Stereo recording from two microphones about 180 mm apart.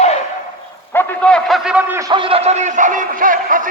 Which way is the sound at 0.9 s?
5° left (ahead or behind).